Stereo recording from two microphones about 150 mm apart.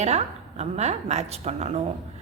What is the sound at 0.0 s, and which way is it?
A woman's voice, 45° right (ahead or behind).